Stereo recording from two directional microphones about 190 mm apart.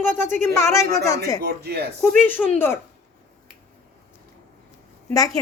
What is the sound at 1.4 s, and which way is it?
Speech, 60° right (ahead or behind).